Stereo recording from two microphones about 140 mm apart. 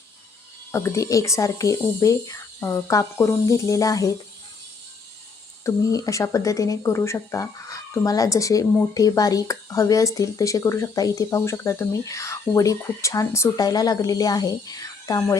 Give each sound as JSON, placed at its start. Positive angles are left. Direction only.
{"t": 0.7, "sound": "speech", "side_deg": 20}
{"t": 5.6, "sound": "speech", "side_deg": 20}